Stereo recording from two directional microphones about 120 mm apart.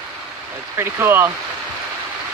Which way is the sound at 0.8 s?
20° right (ahead or behind).